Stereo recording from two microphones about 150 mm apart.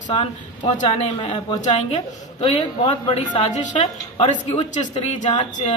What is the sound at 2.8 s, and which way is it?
Speech, 30° left (ahead or behind).